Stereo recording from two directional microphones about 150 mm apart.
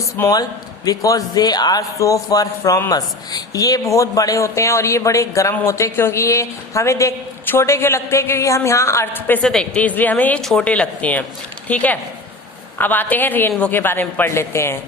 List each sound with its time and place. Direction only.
0.2 s a man's voice: 25° left (ahead or behind)